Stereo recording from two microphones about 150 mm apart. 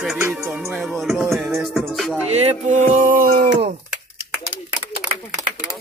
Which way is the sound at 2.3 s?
45° right (ahead or behind).